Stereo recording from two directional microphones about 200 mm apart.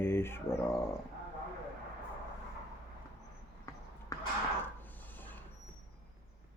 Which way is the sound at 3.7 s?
15° left (ahead or behind).